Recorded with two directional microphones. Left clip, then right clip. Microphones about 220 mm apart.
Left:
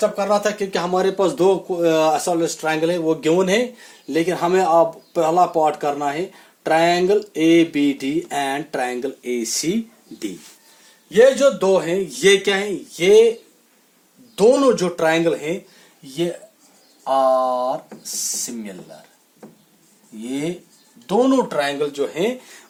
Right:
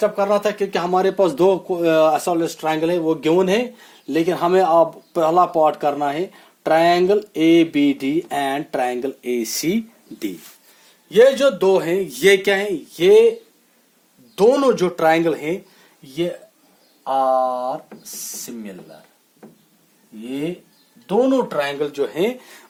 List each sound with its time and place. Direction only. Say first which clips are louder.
0.0 s speech: right 1 dB; 35° right (ahead or behind)
14.3 s speech: even; 30° right (ahead or behind)
17.0 s speech: left 1 dB; 15° right (ahead or behind)
20.2 s speech: left 1 dB; 10° right (ahead or behind)
21.8 s speech: right 1 dB; 30° right (ahead or behind)